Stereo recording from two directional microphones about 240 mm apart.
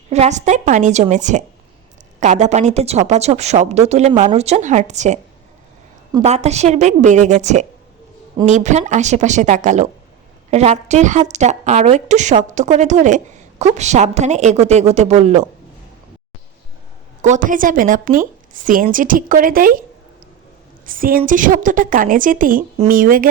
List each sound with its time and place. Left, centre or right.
0.1 s a woman's voice: right
6.2 s a woman's voice: right
17.2 s a woman's voice: right
20.8 s a woman's voice: right